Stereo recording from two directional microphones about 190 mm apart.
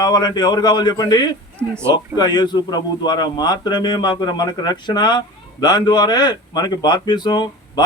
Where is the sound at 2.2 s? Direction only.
20° left (ahead or behind).